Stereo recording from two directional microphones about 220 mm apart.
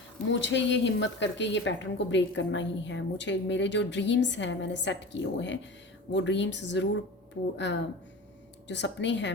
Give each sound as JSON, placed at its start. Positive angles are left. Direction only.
{"t": 0.3, "sound": "a woman's voice", "side_deg": 55}